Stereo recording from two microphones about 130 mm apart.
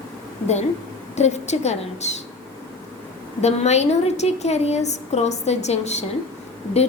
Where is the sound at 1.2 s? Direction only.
60° left (ahead or behind).